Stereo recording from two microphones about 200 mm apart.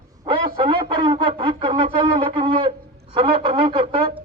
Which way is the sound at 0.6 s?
25° right (ahead or behind).